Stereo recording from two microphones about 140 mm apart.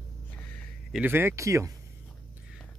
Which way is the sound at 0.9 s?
15° right (ahead or behind).